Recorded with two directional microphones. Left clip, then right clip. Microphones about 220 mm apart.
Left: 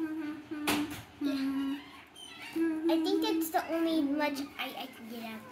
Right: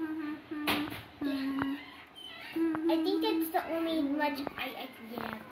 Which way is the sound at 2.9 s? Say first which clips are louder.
Left 1 dB; 20° left (ahead or behind).